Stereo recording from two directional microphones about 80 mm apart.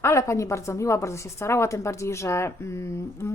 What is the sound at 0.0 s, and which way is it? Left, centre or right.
A woman's voice, left.